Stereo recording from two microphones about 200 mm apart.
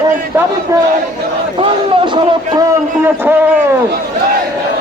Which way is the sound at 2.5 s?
15° right (ahead or behind).